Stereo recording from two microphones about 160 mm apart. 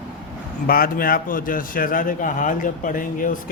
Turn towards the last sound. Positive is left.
turn(degrees=60)  # may be behind; listen again after turning